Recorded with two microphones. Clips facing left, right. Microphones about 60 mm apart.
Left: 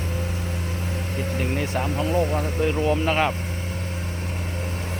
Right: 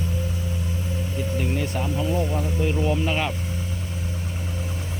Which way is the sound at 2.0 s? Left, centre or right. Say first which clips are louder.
Left 3 dB; left.